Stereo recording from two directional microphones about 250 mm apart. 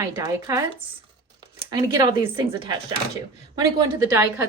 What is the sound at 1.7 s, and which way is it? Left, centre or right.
A woman's voice, centre.